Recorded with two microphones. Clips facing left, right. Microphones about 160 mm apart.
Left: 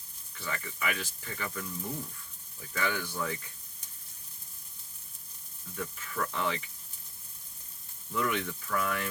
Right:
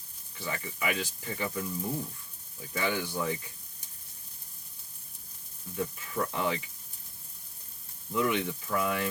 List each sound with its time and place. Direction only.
0.3 s speech: 15° right (ahead or behind)
5.7 s speech: 25° right (ahead or behind)
8.1 s speech: 20° right (ahead or behind)